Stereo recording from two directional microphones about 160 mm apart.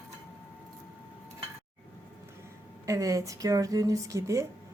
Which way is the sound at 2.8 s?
20° right (ahead or behind).